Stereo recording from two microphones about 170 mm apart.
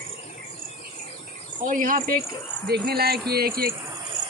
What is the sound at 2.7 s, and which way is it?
Speech, 70° right (ahead or behind).